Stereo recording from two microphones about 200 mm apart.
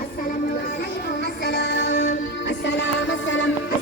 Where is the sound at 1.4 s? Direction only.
55° left (ahead or behind).